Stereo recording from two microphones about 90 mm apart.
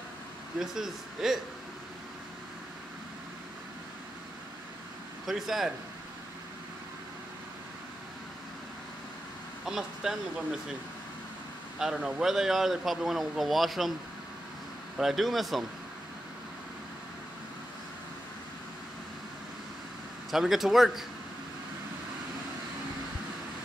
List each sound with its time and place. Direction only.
0.6 s speech: 5° right (ahead or behind)
5.2 s speech: 5° right (ahead or behind)
9.7 s speech: 5° right (ahead or behind)
11.8 s speech: 5° right (ahead or behind)
15.0 s speech: centre (ahead or behind)
20.2 s speech: centre (ahead or behind)